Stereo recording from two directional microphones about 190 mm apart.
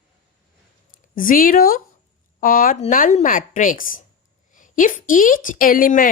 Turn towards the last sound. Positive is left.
turn(degrees=45)  # may be behind; listen again after turning